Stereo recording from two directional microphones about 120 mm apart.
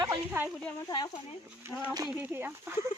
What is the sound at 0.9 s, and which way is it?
Speech, 40° left (ahead or behind).